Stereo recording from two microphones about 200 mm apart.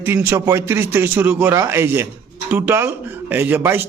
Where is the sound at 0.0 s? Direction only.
10° right (ahead or behind).